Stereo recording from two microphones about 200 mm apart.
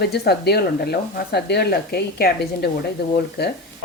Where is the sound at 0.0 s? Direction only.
55° left (ahead or behind).